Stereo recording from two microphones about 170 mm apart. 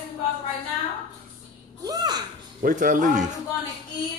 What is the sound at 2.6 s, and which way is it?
Speech, 50° right (ahead or behind).